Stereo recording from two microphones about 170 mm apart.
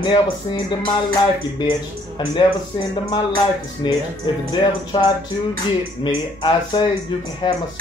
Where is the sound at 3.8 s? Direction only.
25° left (ahead or behind).